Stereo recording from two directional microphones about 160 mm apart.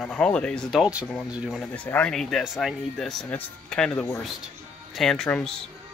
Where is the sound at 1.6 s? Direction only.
10° left (ahead or behind).